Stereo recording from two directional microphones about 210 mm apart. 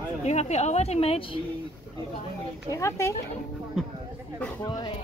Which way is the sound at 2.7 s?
15° left (ahead or behind).